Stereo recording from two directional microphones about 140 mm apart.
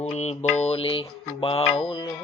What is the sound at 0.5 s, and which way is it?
Mantra, 50° left (ahead or behind).